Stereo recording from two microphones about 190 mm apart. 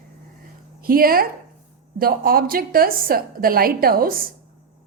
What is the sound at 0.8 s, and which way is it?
A woman's voice, 50° right (ahead or behind).